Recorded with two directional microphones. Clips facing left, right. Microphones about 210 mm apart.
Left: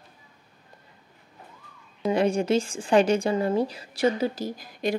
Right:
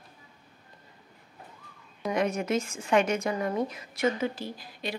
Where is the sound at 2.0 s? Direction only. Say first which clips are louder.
Left 5 dB; 30° left (ahead or behind).